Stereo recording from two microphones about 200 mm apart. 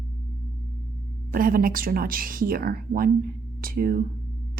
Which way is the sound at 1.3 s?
45° right (ahead or behind).